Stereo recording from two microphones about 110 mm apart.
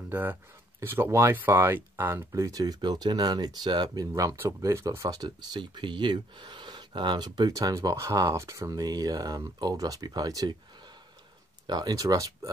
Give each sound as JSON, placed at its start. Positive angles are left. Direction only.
{"t": 0.1, "sound": "speech", "side_deg": -15}
{"t": 11.6, "sound": "speech", "side_deg": -35}